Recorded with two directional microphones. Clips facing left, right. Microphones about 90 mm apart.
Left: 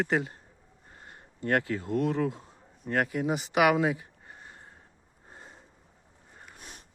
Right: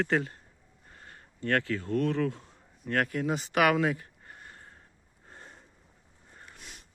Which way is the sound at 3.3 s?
5° left (ahead or behind).